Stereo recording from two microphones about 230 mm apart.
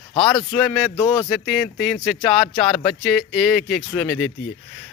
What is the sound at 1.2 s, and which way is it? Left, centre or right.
Speech, centre.